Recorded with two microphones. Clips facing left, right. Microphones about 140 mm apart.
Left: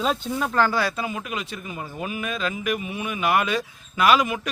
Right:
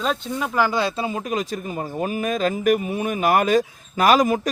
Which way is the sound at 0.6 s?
20° right (ahead or behind).